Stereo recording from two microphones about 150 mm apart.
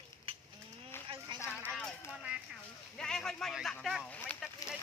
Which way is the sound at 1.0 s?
35° right (ahead or behind).